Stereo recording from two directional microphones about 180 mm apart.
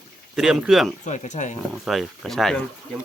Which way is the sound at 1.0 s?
40° left (ahead or behind).